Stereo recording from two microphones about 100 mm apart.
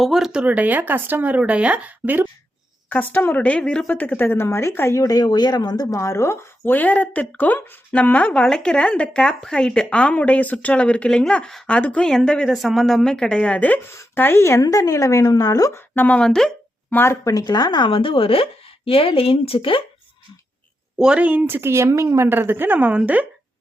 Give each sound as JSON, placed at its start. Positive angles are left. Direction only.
{"t": 0.0, "sound": "speech", "side_deg": 0}
{"t": 2.9, "sound": "a woman's voice", "side_deg": 15}
{"t": 14.6, "sound": "a woman's voice", "side_deg": 35}
{"t": 15.7, "sound": "a woman's voice", "side_deg": 20}
{"t": 16.9, "sound": "speech", "side_deg": 25}
{"t": 21.0, "sound": "a woman's voice", "side_deg": -10}